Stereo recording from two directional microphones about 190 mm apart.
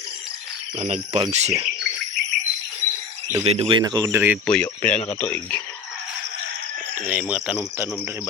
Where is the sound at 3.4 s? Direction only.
30° right (ahead or behind).